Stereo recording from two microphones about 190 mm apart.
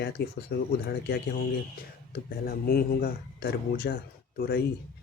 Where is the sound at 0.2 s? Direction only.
55° left (ahead or behind).